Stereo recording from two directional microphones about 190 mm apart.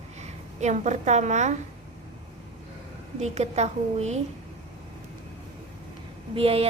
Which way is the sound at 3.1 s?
35° right (ahead or behind).